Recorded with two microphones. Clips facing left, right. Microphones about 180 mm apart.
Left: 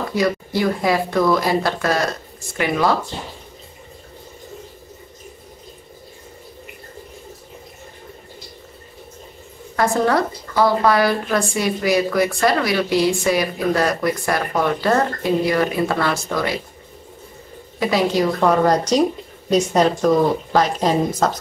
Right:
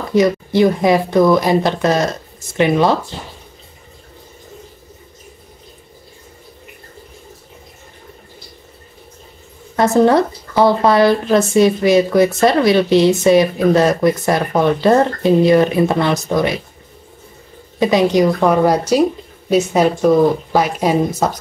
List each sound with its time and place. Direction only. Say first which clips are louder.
0.1 s a woman's voice: right 9 dB; 20° right (ahead or behind)
9.8 s a woman's voice: right 6 dB; 25° right (ahead or behind)
17.7 s speech: right 5 dB; 20° right (ahead or behind)